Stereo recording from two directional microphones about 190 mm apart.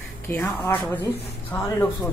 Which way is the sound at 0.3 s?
10° left (ahead or behind).